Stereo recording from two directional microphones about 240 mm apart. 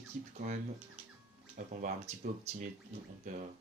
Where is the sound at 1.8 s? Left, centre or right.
Right.